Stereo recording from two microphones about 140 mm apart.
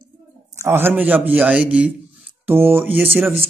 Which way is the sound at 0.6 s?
15° right (ahead or behind).